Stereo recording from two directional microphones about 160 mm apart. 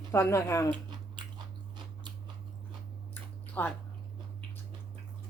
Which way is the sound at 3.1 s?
10° left (ahead or behind).